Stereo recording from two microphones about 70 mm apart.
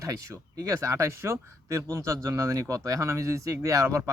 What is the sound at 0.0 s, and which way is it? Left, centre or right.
Speech, right.